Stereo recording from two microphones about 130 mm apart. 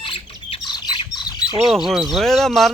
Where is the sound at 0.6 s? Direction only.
35° left (ahead or behind).